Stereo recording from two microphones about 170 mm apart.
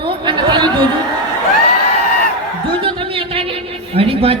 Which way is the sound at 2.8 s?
30° right (ahead or behind).